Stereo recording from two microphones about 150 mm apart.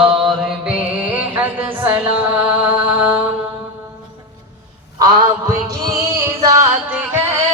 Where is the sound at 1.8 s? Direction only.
10° right (ahead or behind).